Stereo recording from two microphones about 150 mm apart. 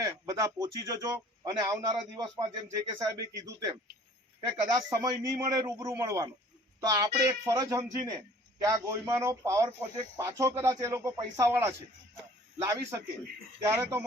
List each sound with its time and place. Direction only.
0.0 s a man's voice: 25° right (ahead or behind)